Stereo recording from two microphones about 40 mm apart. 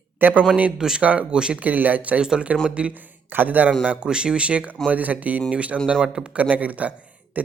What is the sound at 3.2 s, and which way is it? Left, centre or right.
Speech, right.